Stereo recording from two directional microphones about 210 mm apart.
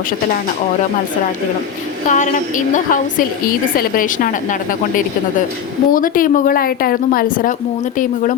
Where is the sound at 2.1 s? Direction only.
35° left (ahead or behind).